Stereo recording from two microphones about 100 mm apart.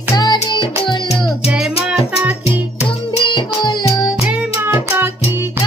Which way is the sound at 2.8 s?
55° left (ahead or behind).